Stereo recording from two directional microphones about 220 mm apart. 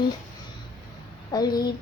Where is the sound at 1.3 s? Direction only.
15° left (ahead or behind).